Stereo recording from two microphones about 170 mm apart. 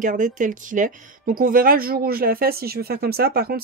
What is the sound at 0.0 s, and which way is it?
A woman's voice, 50° right (ahead or behind).